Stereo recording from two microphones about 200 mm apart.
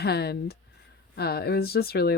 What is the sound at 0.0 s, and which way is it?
Speech, 55° left (ahead or behind).